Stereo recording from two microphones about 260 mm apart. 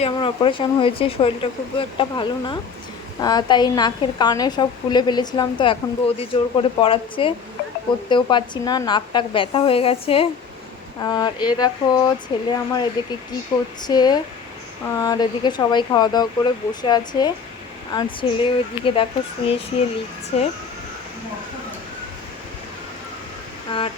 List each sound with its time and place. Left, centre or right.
0.0 s a woman's voice: centre
23.7 s speech: centre